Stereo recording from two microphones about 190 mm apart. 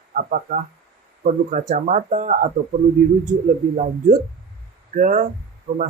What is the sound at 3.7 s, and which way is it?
A man's voice, 40° right (ahead or behind).